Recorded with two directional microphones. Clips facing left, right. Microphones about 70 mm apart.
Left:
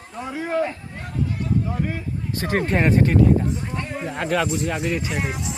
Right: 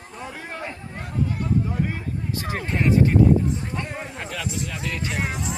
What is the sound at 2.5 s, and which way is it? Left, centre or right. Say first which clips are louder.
Speech: left 3 dB; left.